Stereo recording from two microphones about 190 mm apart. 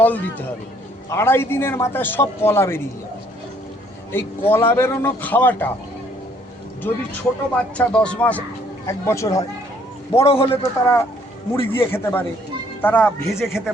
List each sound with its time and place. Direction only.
0.0 s a man's voice: 10° left (ahead or behind)
4.1 s a man's voice: 10° left (ahead or behind)
6.8 s a man's voice: 10° left (ahead or behind)
10.2 s a man's voice: 30° left (ahead or behind)
10.6 s a man's voice: 15° left (ahead or behind)